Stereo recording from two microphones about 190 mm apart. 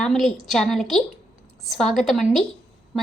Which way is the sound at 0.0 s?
5° left (ahead or behind).